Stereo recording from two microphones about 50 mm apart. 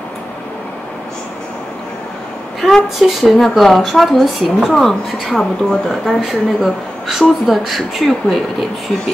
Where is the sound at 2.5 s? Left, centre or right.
Centre.